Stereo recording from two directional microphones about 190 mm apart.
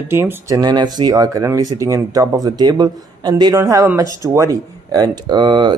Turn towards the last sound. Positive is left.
turn(degrees=-25)  # may be behind; listen again after turning